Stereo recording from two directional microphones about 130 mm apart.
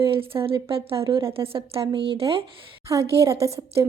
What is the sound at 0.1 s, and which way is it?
A woman's voice, 45° right (ahead or behind).